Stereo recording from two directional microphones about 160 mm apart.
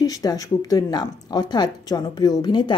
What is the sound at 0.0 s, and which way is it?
Speech, 25° left (ahead or behind).